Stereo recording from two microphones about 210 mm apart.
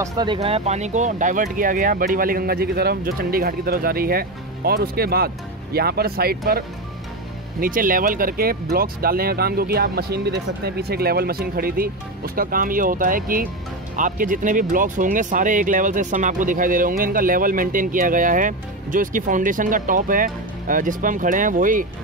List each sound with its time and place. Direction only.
0.0 s speech: 20° right (ahead or behind); by 6.6 s 45° right (ahead or behind)
7.6 s speech: 40° right (ahead or behind)